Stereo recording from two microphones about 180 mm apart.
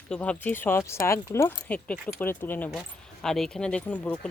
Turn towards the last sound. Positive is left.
turn(degrees=10)  # may be behind; listen again after turning